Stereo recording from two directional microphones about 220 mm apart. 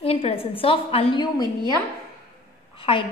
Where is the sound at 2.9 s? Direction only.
25° left (ahead or behind).